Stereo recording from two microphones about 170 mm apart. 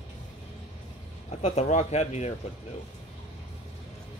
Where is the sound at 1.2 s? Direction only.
40° left (ahead or behind).